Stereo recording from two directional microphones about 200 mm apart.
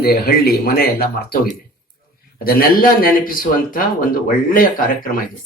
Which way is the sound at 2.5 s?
45° left (ahead or behind).